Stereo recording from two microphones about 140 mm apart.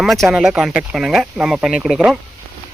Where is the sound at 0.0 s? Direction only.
Centre (ahead or behind).